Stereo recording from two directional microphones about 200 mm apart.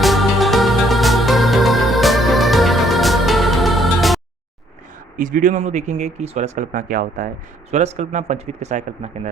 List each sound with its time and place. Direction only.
0.0 s music: centre (ahead or behind)
5.1 s speech: 40° right (ahead or behind)